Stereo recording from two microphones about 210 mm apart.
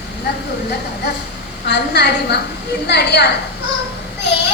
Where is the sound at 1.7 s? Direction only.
55° left (ahead or behind).